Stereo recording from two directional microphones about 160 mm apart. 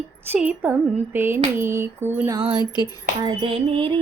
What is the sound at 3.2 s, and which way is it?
Music, 35° right (ahead or behind).